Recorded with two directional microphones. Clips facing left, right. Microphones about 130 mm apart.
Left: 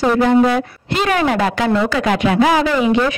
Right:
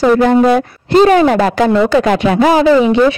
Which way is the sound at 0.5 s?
35° right (ahead or behind).